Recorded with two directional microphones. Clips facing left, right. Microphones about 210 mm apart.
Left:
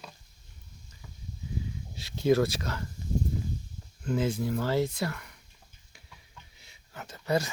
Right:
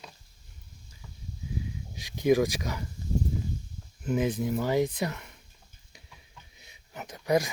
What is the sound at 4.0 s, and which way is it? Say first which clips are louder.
Speech: right 1 dB; 20° right (ahead or behind).